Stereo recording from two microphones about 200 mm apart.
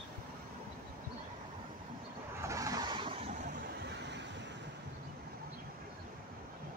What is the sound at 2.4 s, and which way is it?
Vehicle, 15° right (ahead or behind).